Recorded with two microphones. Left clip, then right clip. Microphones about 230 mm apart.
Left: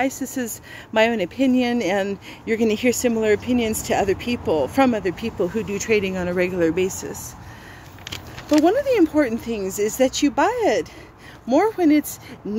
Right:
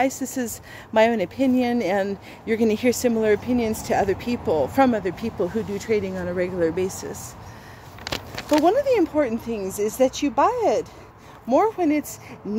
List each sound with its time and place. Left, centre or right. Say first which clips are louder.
0.0 s speech: right 1 dB; centre
8.5 s speech: left 1 dB; centre